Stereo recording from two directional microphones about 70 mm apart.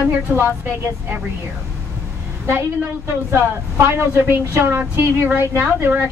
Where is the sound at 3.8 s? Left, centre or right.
Right.